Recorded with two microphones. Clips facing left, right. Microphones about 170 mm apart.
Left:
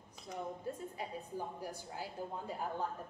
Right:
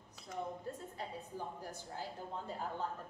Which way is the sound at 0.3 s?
10° left (ahead or behind).